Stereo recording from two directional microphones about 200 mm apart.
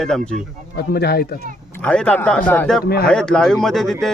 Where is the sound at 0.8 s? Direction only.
50° left (ahead or behind).